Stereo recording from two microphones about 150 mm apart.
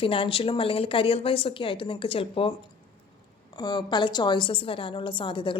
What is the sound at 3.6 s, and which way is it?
A woman's voice, 30° left (ahead or behind).